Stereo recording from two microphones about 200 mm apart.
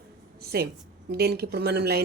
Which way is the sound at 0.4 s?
50° right (ahead or behind).